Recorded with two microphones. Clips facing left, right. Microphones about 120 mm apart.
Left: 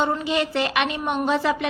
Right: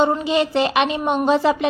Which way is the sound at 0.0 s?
25° right (ahead or behind).